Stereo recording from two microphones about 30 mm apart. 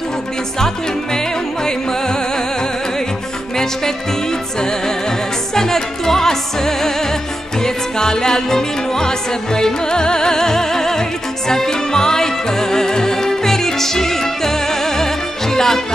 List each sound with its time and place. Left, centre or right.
1.1 s music: left
4.6 s music: left